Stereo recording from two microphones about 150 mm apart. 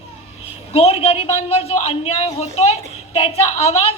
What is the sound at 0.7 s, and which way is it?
A woman's voice, 40° left (ahead or behind).